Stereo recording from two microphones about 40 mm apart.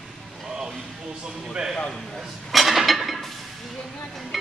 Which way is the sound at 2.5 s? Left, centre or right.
Centre.